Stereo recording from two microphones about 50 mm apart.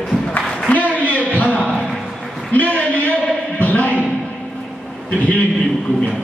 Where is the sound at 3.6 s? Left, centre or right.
Left.